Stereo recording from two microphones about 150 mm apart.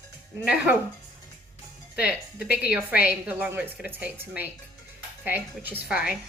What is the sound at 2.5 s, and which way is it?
Speech, 90° left.